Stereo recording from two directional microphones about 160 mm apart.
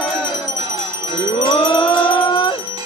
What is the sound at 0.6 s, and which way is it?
Music, 40° right (ahead or behind).